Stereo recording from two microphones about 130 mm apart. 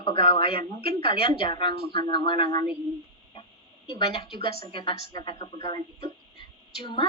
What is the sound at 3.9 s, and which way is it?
A woman's voice, 45° left (ahead or behind).